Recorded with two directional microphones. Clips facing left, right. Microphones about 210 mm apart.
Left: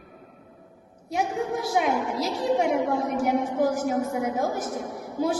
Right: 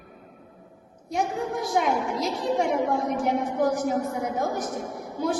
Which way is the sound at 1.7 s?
5° left (ahead or behind).